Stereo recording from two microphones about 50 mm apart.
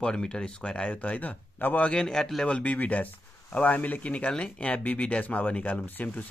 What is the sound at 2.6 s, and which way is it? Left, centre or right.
Speech, left.